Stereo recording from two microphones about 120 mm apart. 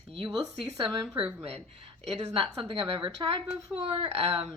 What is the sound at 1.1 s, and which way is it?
A woman's voice, 50° right (ahead or behind).